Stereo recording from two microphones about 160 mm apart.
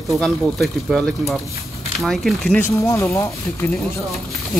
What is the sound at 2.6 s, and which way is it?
Speech, 15° left (ahead or behind).